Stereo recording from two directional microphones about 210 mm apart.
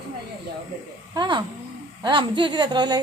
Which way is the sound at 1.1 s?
20° right (ahead or behind).